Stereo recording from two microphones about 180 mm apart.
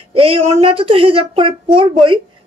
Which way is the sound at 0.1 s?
30° right (ahead or behind).